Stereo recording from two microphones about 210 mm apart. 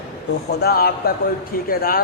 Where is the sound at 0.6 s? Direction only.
45° left (ahead or behind).